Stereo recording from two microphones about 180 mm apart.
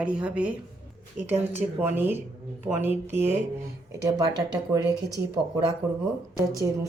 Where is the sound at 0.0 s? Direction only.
5° right (ahead or behind).